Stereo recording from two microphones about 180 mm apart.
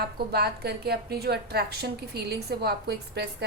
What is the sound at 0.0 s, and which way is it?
A woman's voice, 65° right (ahead or behind).